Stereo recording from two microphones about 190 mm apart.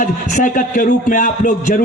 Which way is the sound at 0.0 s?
45° left (ahead or behind).